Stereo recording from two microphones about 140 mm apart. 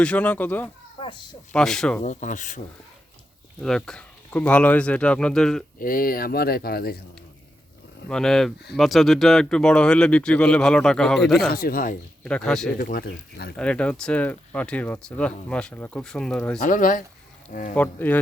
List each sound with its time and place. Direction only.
0.0 s speech: 10° left (ahead or behind)
0.9 s a child's voice: 35° left (ahead or behind)
1.5 s speech: 5° left (ahead or behind)
2.0 s speech: 60° left (ahead or behind)
3.6 s speech: 5° left (ahead or behind)
5.8 s speech: 85° left
8.1 s speech: 5° left (ahead or behind)
11.3 s speech: 90° left
12.2 s speech: 5° left (ahead or behind)
12.8 s speech: 90° left
13.6 s speech: 5° left (ahead or behind)
16.6 s speech: 70° left (ahead or behind)
17.7 s speech: 10° left (ahead or behind)